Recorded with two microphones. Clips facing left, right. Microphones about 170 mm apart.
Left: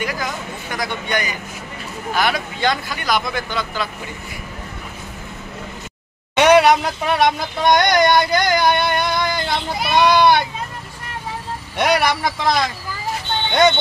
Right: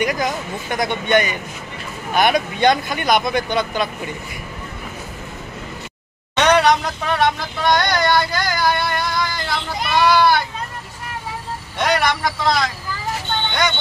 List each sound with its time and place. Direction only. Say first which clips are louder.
0.0 s speech: right 4 dB; 20° right (ahead or behind)
6.3 s a sound: left 3 dB; 10° left (ahead or behind)
9.9 s speech: left 1 dB; 20° left (ahead or behind)
11.8 s speech: left 1 dB; 10° left (ahead or behind)
13.5 s music: left 8 dB; 25° left (ahead or behind)